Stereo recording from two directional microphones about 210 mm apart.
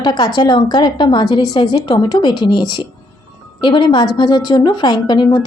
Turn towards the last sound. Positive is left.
turn(degrees=20)  # may be behind; listen again after turning